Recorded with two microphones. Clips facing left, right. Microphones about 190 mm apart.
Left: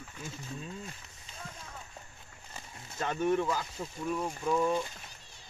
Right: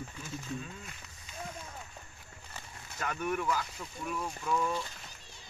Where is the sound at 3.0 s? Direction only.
25° left (ahead or behind).